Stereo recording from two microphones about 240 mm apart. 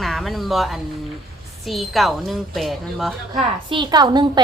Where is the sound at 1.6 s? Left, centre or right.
Centre.